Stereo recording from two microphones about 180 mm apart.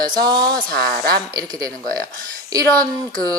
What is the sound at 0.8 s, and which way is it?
Speech, 60° right (ahead or behind).